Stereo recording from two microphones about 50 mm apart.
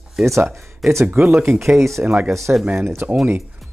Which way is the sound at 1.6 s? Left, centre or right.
Right.